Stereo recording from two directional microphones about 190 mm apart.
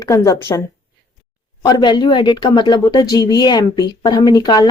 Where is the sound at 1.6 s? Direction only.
20° left (ahead or behind).